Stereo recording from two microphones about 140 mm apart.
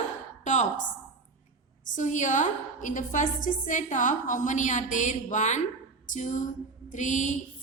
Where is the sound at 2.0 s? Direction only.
60° left (ahead or behind).